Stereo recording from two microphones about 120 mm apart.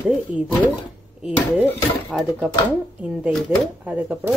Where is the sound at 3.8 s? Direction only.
10° right (ahead or behind).